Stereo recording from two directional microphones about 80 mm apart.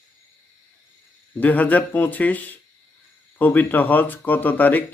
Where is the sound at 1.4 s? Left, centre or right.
Centre.